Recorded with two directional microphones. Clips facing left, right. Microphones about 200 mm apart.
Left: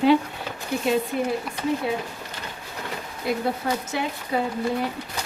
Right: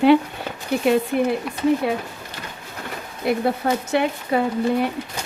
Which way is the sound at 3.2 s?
60° right (ahead or behind).